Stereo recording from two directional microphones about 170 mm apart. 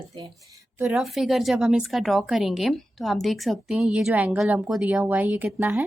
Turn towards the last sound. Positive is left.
turn(degrees=-10)  # may be behind; listen again after turning